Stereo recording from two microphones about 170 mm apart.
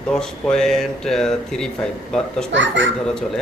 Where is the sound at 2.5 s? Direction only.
90° right.